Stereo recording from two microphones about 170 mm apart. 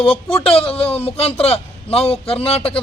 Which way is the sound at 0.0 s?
35° left (ahead or behind).